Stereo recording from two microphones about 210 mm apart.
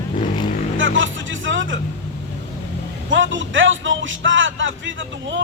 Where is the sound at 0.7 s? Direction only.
65° right (ahead or behind).